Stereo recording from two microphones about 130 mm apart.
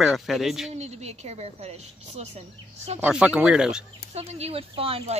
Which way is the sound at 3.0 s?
10° right (ahead or behind).